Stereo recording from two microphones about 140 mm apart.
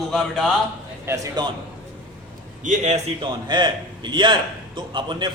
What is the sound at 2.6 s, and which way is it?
Speech, 60° right (ahead or behind).